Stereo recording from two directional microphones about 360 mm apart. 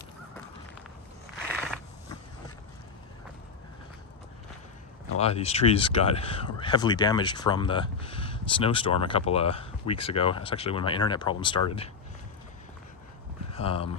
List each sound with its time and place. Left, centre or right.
5.1 s speech: centre
13.5 s speech: centre